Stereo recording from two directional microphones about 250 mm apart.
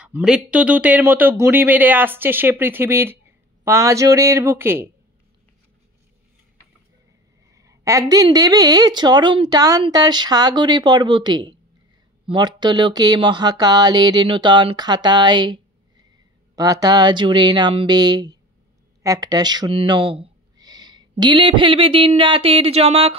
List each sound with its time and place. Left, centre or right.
0.0 s a man's voice: centre
7.5 s a woman's voice: centre